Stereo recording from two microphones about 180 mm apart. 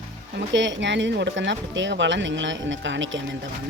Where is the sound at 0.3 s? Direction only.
90° right.